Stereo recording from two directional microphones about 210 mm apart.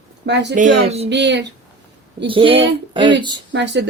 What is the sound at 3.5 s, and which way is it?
Speech, 55° right (ahead or behind).